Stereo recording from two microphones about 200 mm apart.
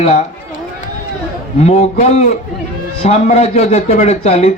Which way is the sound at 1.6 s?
35° left (ahead or behind).